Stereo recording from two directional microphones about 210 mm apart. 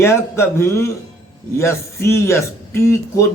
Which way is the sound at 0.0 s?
10° left (ahead or behind).